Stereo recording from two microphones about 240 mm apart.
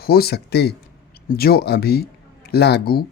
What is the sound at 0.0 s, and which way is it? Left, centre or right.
Speech, left.